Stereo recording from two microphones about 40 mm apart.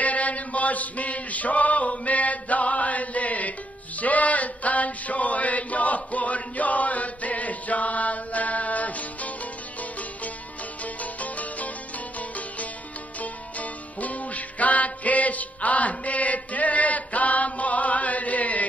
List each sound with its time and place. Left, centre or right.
0.0 s chant: left
4.0 s mantra: left
11.0 s music: left
13.2 s music: left